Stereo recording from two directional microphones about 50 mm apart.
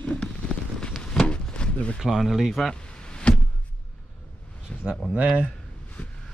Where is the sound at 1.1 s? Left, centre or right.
Centre.